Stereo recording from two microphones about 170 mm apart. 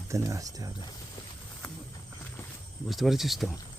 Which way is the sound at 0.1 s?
20° right (ahead or behind).